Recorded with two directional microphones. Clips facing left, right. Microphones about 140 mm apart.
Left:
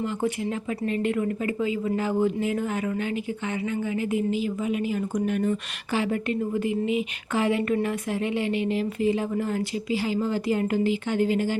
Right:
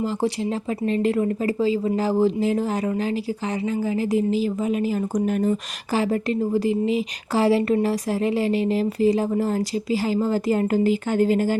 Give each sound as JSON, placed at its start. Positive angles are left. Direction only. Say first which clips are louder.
{"t": 0.9, "sound": "a woman's voice", "louder": "right 5 dB", "side_deg": -35}